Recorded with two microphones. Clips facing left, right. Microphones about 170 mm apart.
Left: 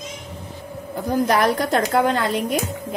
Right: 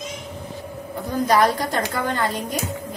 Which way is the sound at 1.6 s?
75° left (ahead or behind).